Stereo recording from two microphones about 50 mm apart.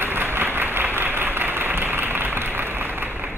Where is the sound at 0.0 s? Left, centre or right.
Right.